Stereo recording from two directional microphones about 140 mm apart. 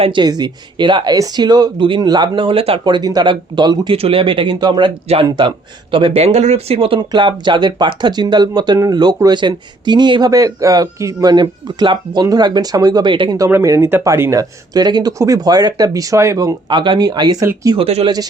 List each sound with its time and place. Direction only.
0.0 s speech: 35° right (ahead or behind)
13.3 s speech: 20° right (ahead or behind)
16.6 s speech: 35° right (ahead or behind)
17.7 s speech: 45° right (ahead or behind)